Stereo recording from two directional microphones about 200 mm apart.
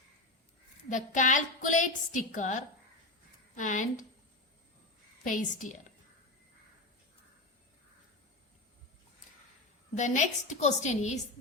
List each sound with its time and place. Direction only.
0.9 s a woman's voice: 40° left (ahead or behind)
5.2 s a woman's voice: 40° left (ahead or behind)
10.0 s a woman's voice: 35° left (ahead or behind)